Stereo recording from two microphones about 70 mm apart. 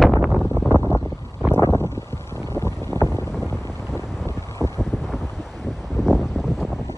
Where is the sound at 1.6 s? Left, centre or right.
Left.